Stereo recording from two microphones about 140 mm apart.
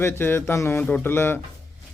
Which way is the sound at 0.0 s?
15° left (ahead or behind).